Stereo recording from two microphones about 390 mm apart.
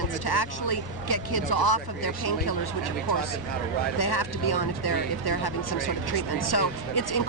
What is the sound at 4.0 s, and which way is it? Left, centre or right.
Speech, left.